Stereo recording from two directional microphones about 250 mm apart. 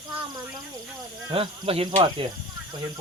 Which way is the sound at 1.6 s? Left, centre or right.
Right.